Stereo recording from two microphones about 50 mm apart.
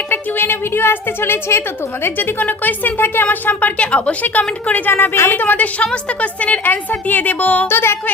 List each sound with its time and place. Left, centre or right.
0.1 s a woman's voice: left
2.0 s speech: left
3.8 s a woman's voice: left
4.2 s speech: left
5.9 s a woman's voice: left
7.7 s a woman's voice: left